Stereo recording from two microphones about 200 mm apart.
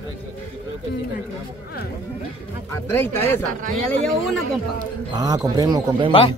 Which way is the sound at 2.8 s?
10° left (ahead or behind).